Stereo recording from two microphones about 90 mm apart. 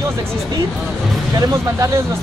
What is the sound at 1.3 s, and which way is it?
Speech, 40° right (ahead or behind).